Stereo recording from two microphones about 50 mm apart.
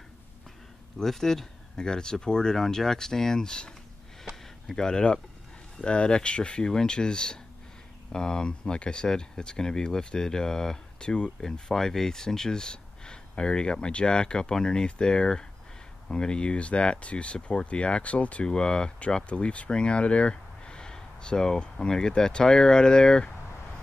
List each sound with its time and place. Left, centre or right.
0.9 s speech: centre
4.2 s a sound: centre
4.7 s speech: centre
18.5 s speech: centre